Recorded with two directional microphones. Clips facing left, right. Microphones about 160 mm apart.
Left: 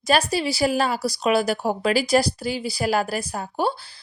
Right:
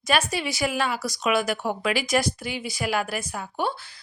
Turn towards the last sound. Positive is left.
turn(degrees=35)  # may be behind; listen again after turning